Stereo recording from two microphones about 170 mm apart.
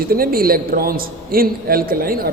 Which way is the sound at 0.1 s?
60° right (ahead or behind).